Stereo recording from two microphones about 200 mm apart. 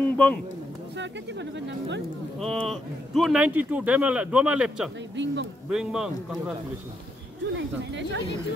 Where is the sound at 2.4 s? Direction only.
Centre (ahead or behind).